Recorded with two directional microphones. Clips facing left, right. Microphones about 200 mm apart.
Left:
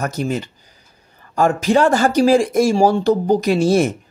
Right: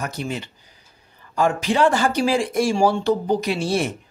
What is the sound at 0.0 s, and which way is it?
Speech, 45° left (ahead or behind).